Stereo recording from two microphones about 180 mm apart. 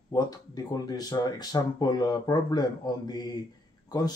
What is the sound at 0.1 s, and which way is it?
Speech, 20° left (ahead or behind).